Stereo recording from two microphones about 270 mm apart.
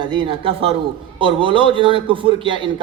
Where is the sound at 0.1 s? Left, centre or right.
Centre.